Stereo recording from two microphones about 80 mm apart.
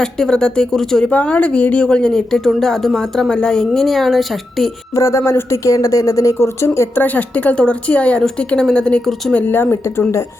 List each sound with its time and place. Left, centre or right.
0.0 s speech: centre
4.9 s speech: left
7.0 s speech: left
9.3 s speech: left